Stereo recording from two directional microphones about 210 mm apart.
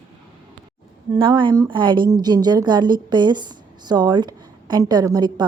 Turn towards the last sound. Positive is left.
turn(degrees=-20)  # may be behind; listen again after turning